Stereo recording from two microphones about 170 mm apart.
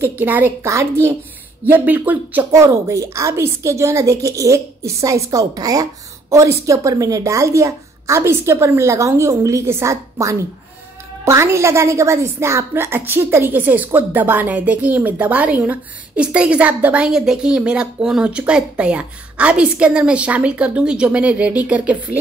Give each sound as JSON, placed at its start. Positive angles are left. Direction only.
{"t": 0.2, "sound": "a woman's voice", "side_deg": -10}